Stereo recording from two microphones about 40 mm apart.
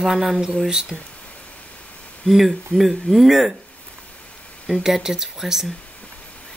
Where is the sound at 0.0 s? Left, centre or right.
Centre.